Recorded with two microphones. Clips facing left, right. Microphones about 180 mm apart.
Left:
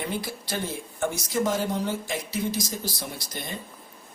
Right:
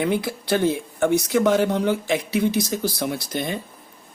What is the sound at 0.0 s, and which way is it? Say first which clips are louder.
Speech: right 9 dB; 65° right (ahead or behind).